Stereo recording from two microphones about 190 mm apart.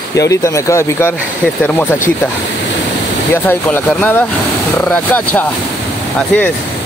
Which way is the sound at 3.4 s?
10° left (ahead or behind).